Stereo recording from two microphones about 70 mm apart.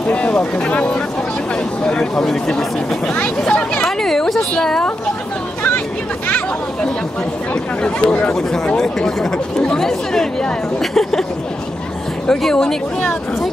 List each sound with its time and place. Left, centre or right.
0.1 s speech: centre
7.8 s speech: centre
12.3 s speech: centre